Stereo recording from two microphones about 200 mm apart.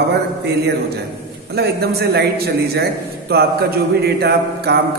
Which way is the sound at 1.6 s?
55° right (ahead or behind).